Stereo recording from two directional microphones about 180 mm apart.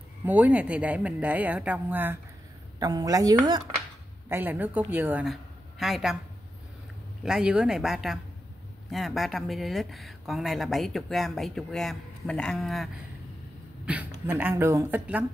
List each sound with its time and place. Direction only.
0.2 s a woman's voice: 10° right (ahead or behind)
4.3 s a woman's voice: 10° right (ahead or behind)
7.2 s a woman's voice: 5° right (ahead or behind)